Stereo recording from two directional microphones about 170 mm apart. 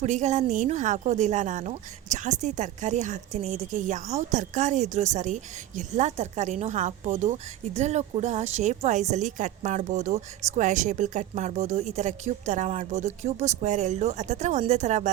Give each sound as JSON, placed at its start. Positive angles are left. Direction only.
{"t": 0.0, "sound": "speech", "side_deg": -45}